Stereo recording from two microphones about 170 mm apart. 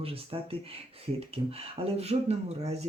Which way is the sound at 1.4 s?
35° right (ahead or behind).